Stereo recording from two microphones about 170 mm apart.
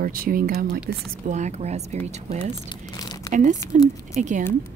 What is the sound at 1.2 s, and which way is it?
Speech, 45° right (ahead or behind).